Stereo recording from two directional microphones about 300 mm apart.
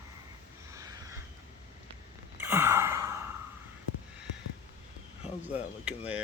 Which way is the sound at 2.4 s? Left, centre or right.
Centre.